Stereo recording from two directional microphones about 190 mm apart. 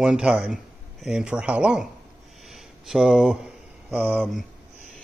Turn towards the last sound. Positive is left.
turn(degrees=-10)  # may be behind; listen again after turning